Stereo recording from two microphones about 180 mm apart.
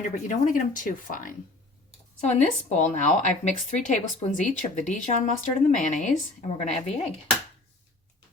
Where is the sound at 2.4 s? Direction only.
40° left (ahead or behind).